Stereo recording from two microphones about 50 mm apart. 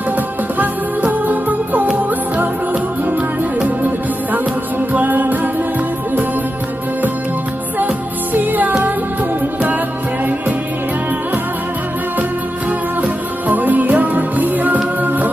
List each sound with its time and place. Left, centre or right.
1.2 s music: right
4.9 s music: right
7.8 s music: right
13.5 s music: right